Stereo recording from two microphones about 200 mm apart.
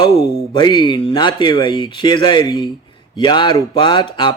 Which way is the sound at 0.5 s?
20° left (ahead or behind).